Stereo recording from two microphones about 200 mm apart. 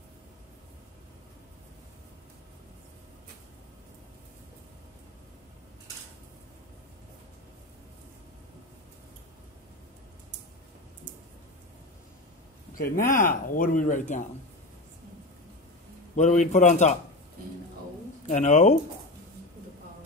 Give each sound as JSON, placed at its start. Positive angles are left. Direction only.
{"t": 12.7, "sound": "speech", "side_deg": 45}
{"t": 16.2, "sound": "a man's voice", "side_deg": 35}
{"t": 18.3, "sound": "a man's voice", "side_deg": 35}